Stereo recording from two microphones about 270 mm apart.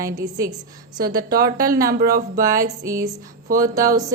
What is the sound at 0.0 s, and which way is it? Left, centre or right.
Speech, centre.